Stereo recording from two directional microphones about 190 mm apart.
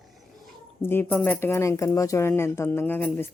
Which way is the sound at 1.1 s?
Centre (ahead or behind).